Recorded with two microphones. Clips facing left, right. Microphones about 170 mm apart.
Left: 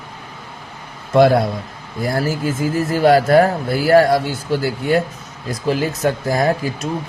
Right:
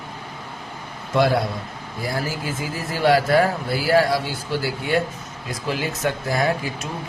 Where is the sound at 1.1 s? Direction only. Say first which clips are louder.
Left 7 dB; 50° left (ahead or behind).